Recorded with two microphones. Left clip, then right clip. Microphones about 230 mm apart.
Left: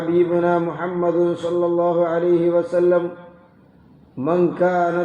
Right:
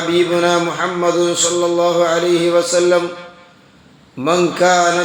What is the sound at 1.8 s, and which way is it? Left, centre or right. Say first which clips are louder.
Speech: right 6 dB; right.